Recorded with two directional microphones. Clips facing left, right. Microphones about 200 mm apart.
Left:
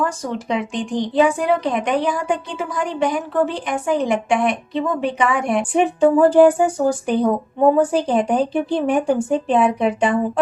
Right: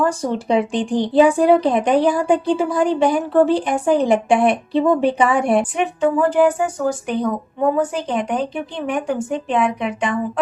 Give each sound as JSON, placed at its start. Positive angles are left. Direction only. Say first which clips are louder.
{"t": 0.0, "sound": "speech", "louder": "right 3 dB", "side_deg": -35}
{"t": 5.7, "sound": "speech", "louder": "left 4 dB", "side_deg": 35}